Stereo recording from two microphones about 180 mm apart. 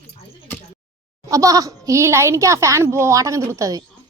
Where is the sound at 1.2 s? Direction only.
20° right (ahead or behind).